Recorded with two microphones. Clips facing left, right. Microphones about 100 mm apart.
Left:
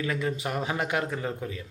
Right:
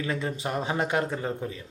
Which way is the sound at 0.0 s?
30° right (ahead or behind).